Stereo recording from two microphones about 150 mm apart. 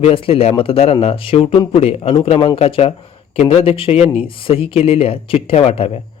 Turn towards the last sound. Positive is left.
turn(degrees=40)  # may be behind; listen again after turning